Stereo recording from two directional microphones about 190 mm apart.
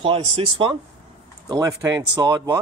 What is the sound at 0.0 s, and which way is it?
Speech, 30° right (ahead or behind).